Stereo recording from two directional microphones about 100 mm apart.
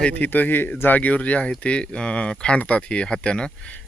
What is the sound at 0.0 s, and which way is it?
Speech, 15° left (ahead or behind).